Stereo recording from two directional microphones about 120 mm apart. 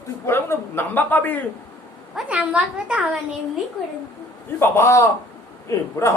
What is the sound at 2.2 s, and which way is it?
A woman's voice, 10° right (ahead or behind).